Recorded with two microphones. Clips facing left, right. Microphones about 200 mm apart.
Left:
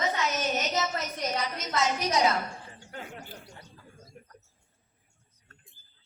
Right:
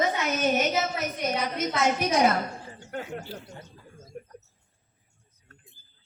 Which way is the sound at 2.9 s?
55° right (ahead or behind).